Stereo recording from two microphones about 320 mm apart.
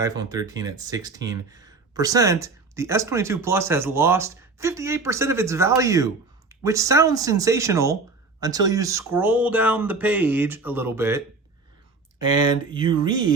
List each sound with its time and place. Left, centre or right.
0.0 s speech: centre
12.7 s speech: centre